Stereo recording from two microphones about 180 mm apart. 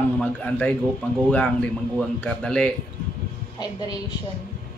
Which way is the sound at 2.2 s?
5° left (ahead or behind).